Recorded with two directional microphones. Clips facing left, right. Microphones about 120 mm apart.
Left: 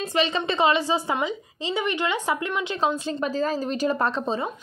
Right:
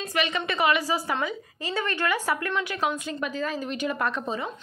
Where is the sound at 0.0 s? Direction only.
30° left (ahead or behind).